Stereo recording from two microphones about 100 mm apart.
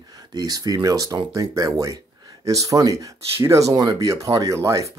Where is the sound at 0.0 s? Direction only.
40° right (ahead or behind).